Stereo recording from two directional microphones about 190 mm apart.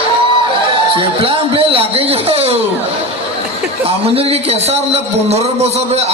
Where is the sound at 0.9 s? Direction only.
30° right (ahead or behind).